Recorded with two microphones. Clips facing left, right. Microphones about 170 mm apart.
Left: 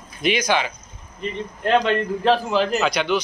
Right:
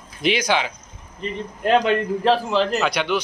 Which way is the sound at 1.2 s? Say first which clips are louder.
Even; 5° right (ahead or behind).